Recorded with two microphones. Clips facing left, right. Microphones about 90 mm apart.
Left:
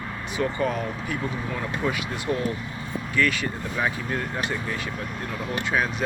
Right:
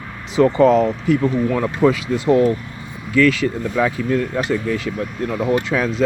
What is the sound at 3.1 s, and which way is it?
Speech, 90° right.